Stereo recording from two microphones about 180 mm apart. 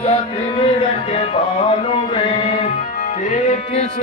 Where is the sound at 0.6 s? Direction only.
35° left (ahead or behind).